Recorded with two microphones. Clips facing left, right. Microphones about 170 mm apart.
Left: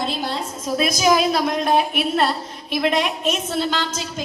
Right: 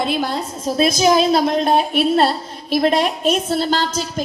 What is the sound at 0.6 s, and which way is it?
A woman's voice, 30° right (ahead or behind).